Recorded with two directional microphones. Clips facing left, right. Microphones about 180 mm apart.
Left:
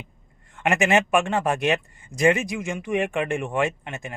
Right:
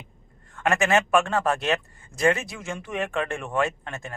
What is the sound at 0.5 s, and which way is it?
Speech, 15° left (ahead or behind).